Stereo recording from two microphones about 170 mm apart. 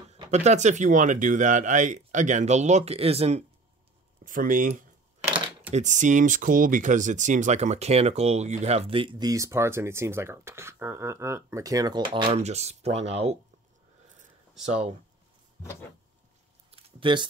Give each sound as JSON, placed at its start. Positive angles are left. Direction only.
{"t": 0.1, "sound": "speech", "side_deg": -40}
{"t": 4.2, "sound": "speech", "side_deg": -50}
{"t": 16.7, "sound": "a sound", "side_deg": -30}